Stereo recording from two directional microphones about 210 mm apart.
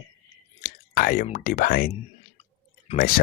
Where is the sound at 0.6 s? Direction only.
45° left (ahead or behind).